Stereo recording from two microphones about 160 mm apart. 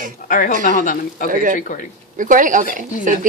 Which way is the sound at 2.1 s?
55° right (ahead or behind).